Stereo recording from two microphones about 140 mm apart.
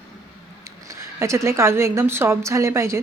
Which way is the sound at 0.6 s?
20° right (ahead or behind).